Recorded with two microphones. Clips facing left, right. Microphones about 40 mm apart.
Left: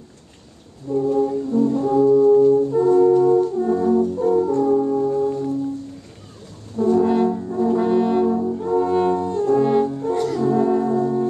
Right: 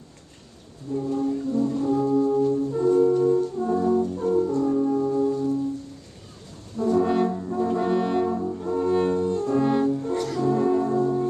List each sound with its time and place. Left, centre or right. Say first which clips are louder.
0.9 s music: left 7 dB; left
1.6 s brass instrument: left 8 dB; centre
2.5 s music: left 5 dB; centre
3.5 s brass instrument: left 4 dB; centre
4.1 s french horn: left 5 dB; centre
4.6 s brass instrument: left 5 dB; left
4.8 s music: left 3 dB; centre
5.3 s music: left 1 dB; left
6.8 s brass instrument: left 4 dB; centre